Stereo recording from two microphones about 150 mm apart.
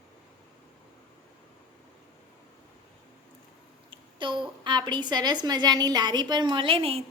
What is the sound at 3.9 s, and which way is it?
A woman's voice, 35° right (ahead or behind).